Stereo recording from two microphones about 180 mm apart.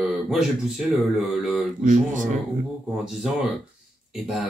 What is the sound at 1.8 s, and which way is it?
Speech, 45° right (ahead or behind).